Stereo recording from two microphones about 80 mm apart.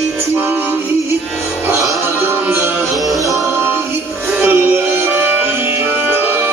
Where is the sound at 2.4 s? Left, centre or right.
Right.